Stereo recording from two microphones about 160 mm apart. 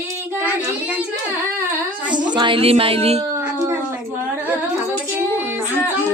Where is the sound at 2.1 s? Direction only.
30° right (ahead or behind).